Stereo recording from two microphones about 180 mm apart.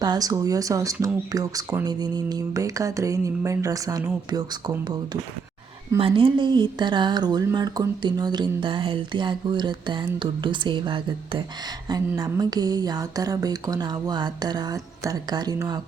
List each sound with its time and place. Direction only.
0.0 s speech: 20° right (ahead or behind)
6.0 s speech: 30° right (ahead or behind)